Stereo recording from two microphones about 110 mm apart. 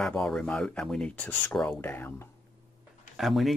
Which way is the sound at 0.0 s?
5° left (ahead or behind).